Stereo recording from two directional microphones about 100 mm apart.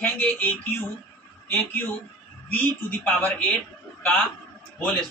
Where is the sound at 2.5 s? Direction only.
15° left (ahead or behind).